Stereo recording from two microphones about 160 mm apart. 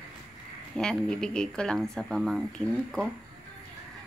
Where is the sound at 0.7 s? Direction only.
5° left (ahead or behind).